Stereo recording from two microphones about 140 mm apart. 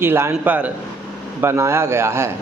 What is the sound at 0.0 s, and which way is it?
A man's voice, 15° right (ahead or behind).